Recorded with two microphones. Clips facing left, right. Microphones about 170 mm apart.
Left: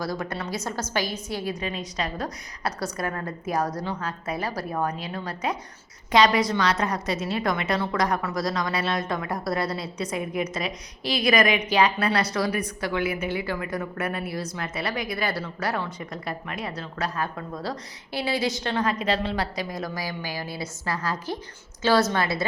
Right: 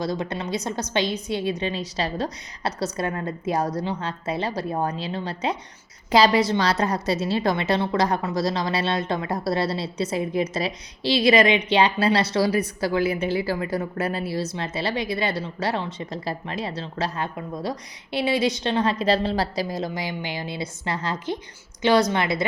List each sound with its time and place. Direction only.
0.0 s a woman's voice: 20° right (ahead or behind)